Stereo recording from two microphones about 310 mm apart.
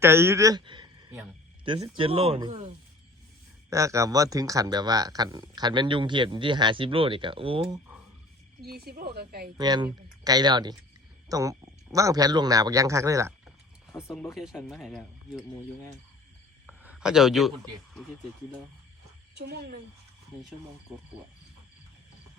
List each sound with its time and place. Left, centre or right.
0.0 s speech: centre
8.6 s speech: right
9.6 s speech: centre
13.9 s speech: centre
16.6 s a sound: centre
19.3 s speech: right